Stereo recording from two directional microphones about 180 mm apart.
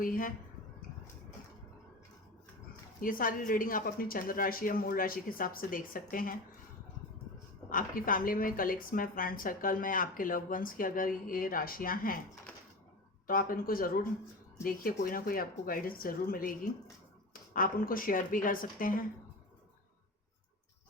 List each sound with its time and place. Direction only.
0.0 s speech: 50° left (ahead or behind)
3.0 s a woman's voice: 50° left (ahead or behind)
7.7 s a woman's voice: 50° left (ahead or behind)
13.2 s a woman's voice: 50° left (ahead or behind)